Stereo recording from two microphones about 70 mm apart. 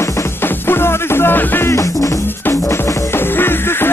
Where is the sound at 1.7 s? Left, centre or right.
Left.